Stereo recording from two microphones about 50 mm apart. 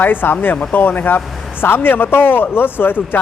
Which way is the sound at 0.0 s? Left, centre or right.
Left.